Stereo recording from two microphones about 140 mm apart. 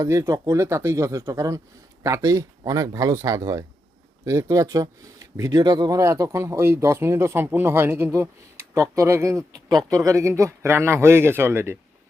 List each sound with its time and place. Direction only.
0.0 s speech: 20° right (ahead or behind)